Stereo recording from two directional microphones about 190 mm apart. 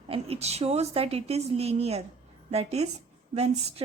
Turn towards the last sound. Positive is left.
turn(degrees=-35)  # may be behind; listen again after turning